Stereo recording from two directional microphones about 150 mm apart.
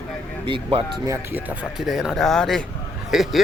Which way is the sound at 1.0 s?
15° right (ahead or behind).